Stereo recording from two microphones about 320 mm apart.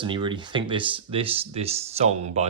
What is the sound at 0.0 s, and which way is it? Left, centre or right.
Speech, centre.